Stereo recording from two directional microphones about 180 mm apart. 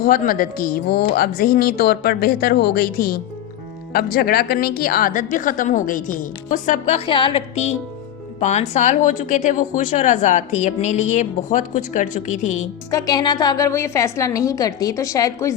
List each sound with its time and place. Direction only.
0.0 s a woman's voice: 50° left (ahead or behind)
12.9 s a woman's voice: 20° left (ahead or behind)